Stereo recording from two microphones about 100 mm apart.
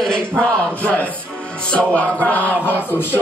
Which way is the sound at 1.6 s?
10° left (ahead or behind).